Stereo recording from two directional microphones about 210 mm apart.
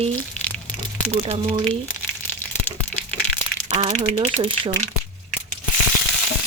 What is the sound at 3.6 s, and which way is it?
Speech, 30° right (ahead or behind).